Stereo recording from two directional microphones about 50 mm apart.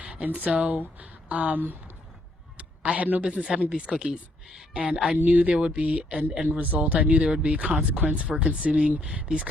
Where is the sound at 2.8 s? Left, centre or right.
Right.